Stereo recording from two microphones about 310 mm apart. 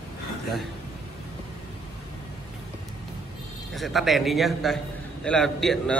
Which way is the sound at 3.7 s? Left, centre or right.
Centre.